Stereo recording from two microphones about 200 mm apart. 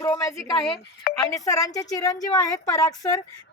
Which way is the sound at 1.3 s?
15° left (ahead or behind).